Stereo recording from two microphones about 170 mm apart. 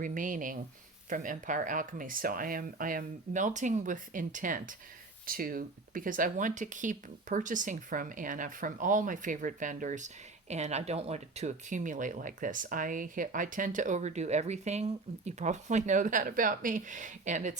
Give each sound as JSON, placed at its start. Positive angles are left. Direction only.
{"t": 0.0, "sound": "speech", "side_deg": -50}